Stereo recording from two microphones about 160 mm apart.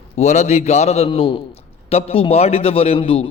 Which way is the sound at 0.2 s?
45° left (ahead or behind).